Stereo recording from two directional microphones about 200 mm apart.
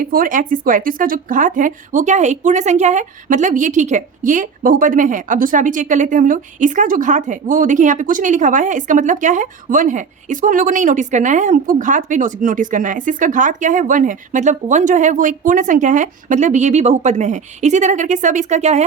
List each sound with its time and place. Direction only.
0.0 s speech: 45° right (ahead or behind)